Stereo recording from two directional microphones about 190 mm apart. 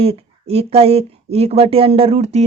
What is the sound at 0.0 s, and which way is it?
Speech, 30° right (ahead or behind).